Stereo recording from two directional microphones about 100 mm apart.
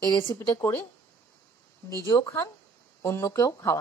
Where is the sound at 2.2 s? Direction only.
30° left (ahead or behind).